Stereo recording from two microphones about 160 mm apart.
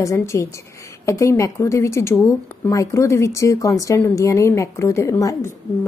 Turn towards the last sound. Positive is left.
turn(degrees=20)  # may be behind; listen again after turning